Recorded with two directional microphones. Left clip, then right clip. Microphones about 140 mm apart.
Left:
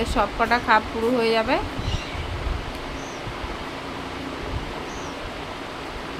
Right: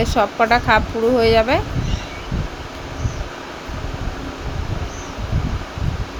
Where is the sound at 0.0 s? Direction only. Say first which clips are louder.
Right 6 dB; 30° right (ahead or behind).